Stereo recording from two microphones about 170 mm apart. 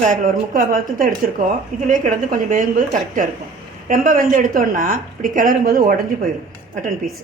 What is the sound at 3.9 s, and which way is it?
A woman's voice, 55° right (ahead or behind).